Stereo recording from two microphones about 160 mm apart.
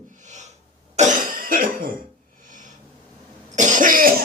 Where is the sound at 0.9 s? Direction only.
55° right (ahead or behind).